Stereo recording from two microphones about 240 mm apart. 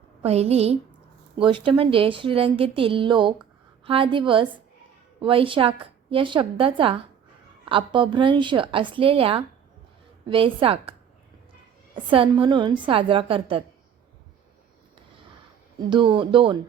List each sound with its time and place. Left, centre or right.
0.2 s a woman's voice: right
12.1 s a woman's voice: right
15.9 s a woman's voice: centre